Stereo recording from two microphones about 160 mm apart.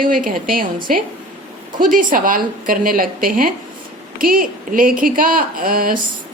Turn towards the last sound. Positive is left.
turn(degrees=-60)  # may be behind; listen again after turning